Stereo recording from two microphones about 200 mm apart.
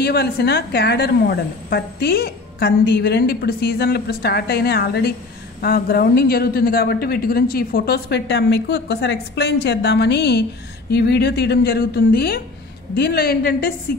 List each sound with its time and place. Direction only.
0.0 s a woman's voice: 50° left (ahead or behind)